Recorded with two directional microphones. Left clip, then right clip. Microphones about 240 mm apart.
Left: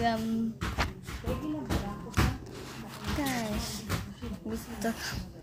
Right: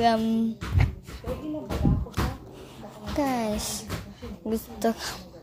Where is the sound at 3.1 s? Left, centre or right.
Right.